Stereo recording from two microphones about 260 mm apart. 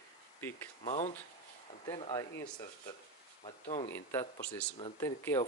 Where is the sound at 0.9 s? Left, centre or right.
Left.